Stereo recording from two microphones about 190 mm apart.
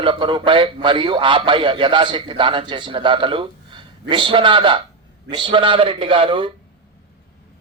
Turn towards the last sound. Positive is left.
turn(degrees=-25)  # may be behind; listen again after turning